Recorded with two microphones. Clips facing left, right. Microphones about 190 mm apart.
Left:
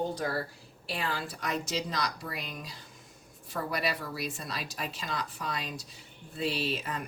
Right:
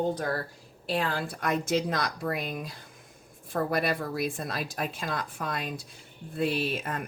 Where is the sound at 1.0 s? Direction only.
55° right (ahead or behind).